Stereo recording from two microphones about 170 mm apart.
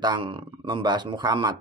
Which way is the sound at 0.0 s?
30° right (ahead or behind).